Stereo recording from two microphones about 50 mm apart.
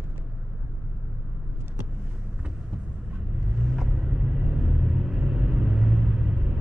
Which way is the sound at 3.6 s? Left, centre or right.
Centre.